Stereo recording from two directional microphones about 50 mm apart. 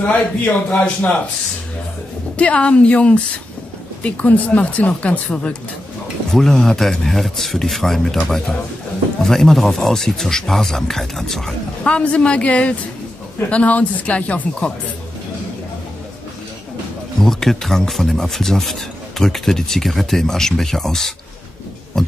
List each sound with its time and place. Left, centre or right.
0.0 s a man's voice: left
2.3 s speech: left
6.3 s speech: centre
11.8 s speech: left
17.2 s speech: centre